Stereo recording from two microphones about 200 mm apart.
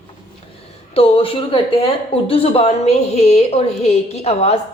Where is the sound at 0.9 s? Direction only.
30° left (ahead or behind).